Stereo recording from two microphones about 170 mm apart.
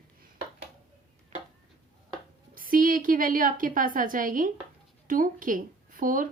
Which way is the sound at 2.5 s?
55° right (ahead or behind).